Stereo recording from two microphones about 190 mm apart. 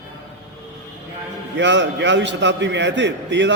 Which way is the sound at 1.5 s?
70° right (ahead or behind).